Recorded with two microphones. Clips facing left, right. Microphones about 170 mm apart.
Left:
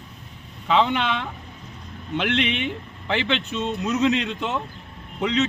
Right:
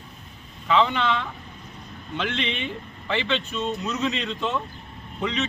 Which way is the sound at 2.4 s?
15° left (ahead or behind).